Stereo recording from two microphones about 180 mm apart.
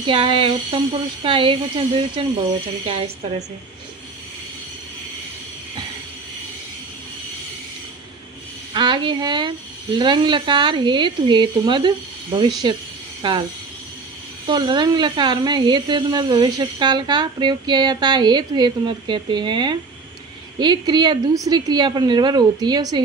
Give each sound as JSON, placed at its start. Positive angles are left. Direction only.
{"t": 0.0, "sound": "a woman's voice", "side_deg": -30}
{"t": 8.7, "sound": "speech", "side_deg": -25}
{"t": 14.5, "sound": "speech", "side_deg": -25}